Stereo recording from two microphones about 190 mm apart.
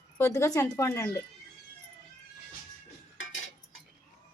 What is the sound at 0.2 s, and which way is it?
Speech, 15° left (ahead or behind).